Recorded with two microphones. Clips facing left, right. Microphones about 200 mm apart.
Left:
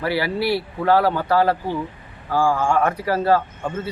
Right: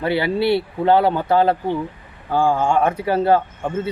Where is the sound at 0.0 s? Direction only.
25° right (ahead or behind).